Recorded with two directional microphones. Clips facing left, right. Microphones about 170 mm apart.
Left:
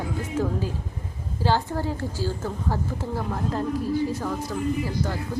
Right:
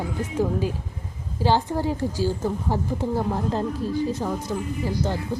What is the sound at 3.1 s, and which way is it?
Speech, 25° right (ahead or behind).